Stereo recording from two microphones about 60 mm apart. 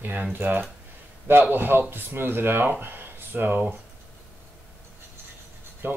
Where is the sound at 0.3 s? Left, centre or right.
Right.